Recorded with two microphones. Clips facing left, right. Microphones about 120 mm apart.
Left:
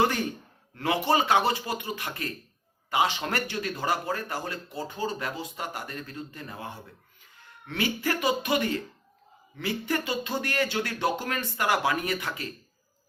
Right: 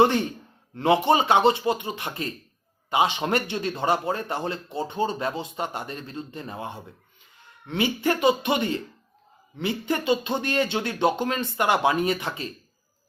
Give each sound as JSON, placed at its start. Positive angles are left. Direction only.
{"t": 0.0, "sound": "speech", "side_deg": -25}